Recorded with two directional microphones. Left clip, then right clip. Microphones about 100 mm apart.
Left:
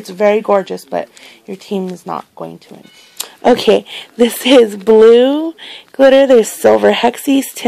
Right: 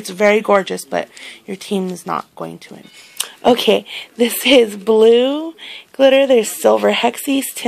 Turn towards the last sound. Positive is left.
turn(degrees=80)